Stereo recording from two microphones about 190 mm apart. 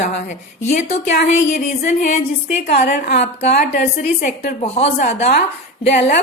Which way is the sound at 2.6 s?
55° left (ahead or behind).